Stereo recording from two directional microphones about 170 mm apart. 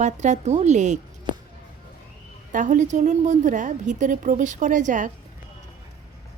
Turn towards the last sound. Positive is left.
turn(degrees=-45)  # may be behind; listen again after turning